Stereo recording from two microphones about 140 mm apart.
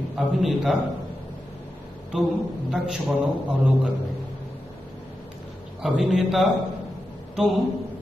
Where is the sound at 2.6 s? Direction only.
Centre (ahead or behind).